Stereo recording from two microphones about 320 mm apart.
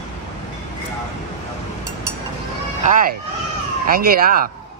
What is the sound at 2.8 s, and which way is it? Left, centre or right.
Speech, right.